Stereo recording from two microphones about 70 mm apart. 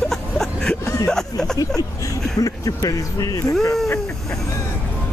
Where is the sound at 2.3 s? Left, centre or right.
Left.